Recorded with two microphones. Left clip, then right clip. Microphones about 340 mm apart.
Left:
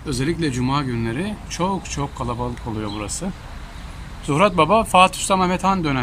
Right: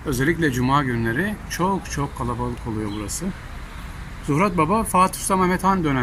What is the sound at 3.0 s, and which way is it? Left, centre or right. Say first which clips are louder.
Speech: left 2 dB; centre.